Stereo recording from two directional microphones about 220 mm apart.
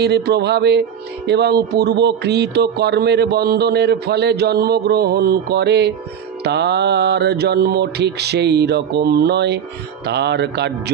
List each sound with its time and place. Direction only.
0.0 s speech: 50° right (ahead or behind)